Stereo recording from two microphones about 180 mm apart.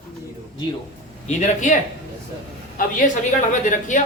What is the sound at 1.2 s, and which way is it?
Speech, 40° left (ahead or behind).